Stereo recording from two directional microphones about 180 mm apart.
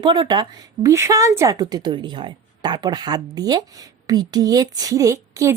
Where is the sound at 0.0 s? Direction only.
25° right (ahead or behind).